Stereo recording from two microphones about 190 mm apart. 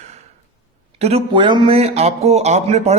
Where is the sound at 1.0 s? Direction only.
30° right (ahead or behind).